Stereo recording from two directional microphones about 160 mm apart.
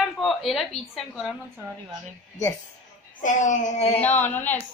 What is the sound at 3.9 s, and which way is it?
Speech, 10° left (ahead or behind).